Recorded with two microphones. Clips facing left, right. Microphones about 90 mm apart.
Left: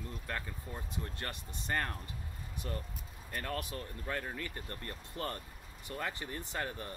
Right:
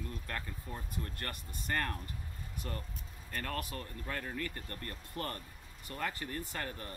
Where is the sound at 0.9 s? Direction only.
20° left (ahead or behind).